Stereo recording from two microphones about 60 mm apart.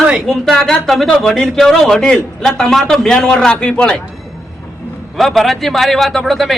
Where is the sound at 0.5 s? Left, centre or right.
Centre.